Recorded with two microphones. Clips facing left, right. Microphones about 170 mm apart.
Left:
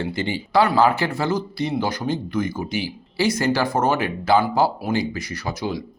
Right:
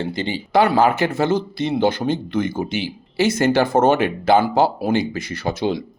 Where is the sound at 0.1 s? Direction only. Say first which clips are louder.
Right 2 dB; 20° right (ahead or behind).